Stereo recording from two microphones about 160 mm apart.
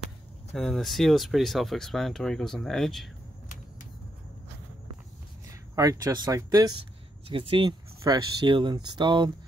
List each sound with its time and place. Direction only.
0.5 s speech: centre (ahead or behind)
5.5 s speech: 20° right (ahead or behind)